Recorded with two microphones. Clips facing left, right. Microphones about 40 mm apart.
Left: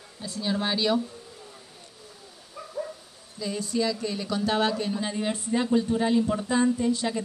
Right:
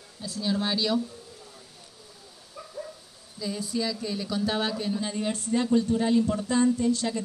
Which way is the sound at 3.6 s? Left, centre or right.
Centre.